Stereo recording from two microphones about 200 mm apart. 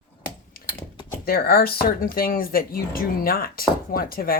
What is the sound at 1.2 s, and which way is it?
Speech, 50° left (ahead or behind).